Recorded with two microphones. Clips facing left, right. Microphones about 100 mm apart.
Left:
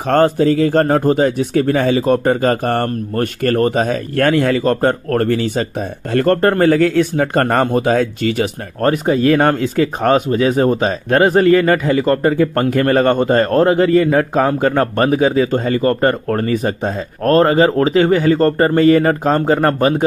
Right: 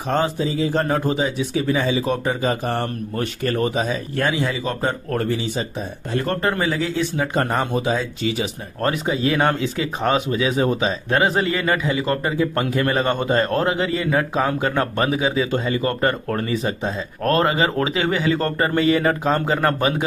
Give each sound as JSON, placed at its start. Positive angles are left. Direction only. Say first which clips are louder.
{"t": 0.1, "sound": "speech", "louder": "left 9 dB", "side_deg": 65}